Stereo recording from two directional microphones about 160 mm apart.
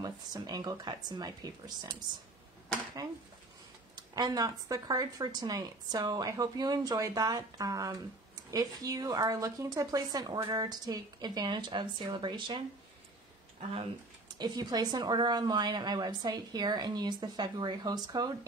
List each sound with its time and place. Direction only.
0.0 s speech: 25° right (ahead or behind)
3.9 s speech: 25° right (ahead or behind)
14.4 s speech: 25° right (ahead or behind)